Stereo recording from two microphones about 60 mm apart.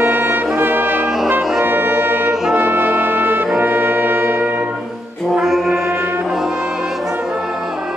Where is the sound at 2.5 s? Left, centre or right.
Right.